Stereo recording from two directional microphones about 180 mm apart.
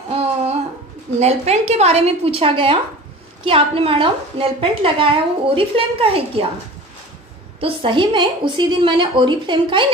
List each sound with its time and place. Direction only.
0.1 s a sound: 35° right (ahead or behind)
1.2 s a woman's voice: 35° right (ahead or behind)
7.6 s a woman's voice: 25° right (ahead or behind)